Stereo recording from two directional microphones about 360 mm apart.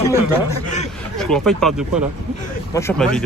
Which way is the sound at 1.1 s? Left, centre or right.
Centre.